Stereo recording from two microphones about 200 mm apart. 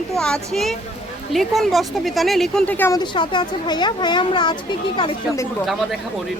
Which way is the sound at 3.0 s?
20° left (ahead or behind).